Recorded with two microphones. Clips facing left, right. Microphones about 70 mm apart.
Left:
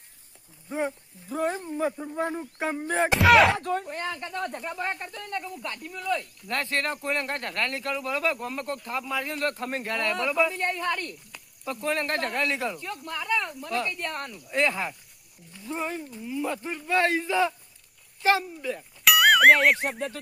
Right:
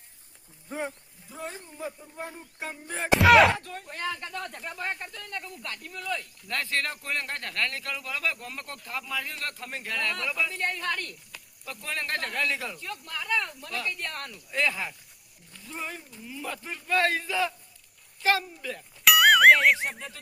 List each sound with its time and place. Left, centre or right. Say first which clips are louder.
1.3 s speech: left 11 dB; left
1.7 s speech: left 10 dB; left
3.2 s speech: right 1 dB; centre
3.6 s speech: left 12 dB; left
3.9 s speech: left 2 dB; left
4.5 s speech: left 3 dB; centre
5.1 s speech: left 5 dB; left
6.5 s speech: left 2 dB; left
10.1 s speech: left 9 dB; centre
11.6 s speech: left 7 dB; left
16.1 s speech: left 8 dB; centre
16.4 s speech: left 5 dB; centre
19.0 s a sound: even; centre